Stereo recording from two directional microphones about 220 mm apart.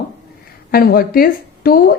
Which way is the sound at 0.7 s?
45° left (ahead or behind).